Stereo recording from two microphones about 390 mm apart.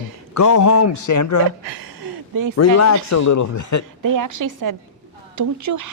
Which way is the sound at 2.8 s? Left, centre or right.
Left.